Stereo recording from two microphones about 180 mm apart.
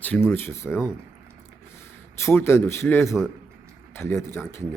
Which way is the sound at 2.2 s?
15° left (ahead or behind).